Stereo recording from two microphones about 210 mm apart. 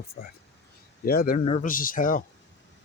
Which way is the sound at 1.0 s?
45° left (ahead or behind).